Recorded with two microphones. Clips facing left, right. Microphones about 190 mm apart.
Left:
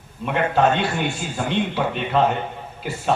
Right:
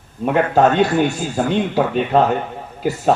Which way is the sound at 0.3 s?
40° right (ahead or behind).